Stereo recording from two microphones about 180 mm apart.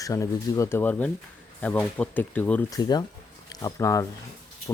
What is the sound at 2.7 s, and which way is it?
Speech, 25° left (ahead or behind).